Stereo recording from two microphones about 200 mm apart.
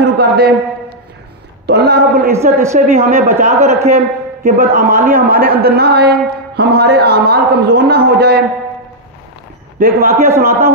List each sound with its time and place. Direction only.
0.0 s a sound: 55° right (ahead or behind)
1.7 s a man's voice: 55° right (ahead or behind)
2.6 s speech: 15° right (ahead or behind)
3.3 s a man's voice: 35° right (ahead or behind); by 8.5 s 55° right (ahead or behind)
9.8 s a man's voice: 45° right (ahead or behind)
10.2 s speech: 15° right (ahead or behind)